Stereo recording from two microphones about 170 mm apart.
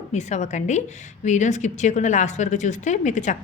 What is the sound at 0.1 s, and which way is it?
Speech, 45° left (ahead or behind).